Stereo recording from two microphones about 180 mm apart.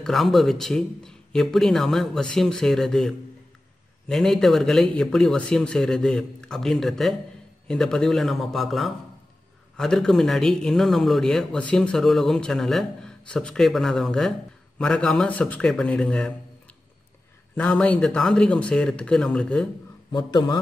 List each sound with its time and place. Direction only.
0.0 s speech: centre (ahead or behind)
17.6 s speech: 5° left (ahead or behind)
20.1 s a man's voice: 25° left (ahead or behind)